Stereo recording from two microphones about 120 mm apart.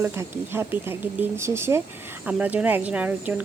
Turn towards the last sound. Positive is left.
turn(degrees=-15)  # may be behind; listen again after turning